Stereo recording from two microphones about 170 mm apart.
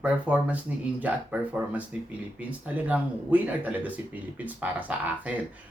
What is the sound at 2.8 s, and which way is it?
Speech, 10° right (ahead or behind).